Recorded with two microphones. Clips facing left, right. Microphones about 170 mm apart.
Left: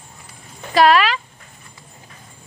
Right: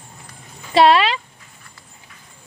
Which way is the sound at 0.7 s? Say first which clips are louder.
Right 1 dB; 25° right (ahead or behind).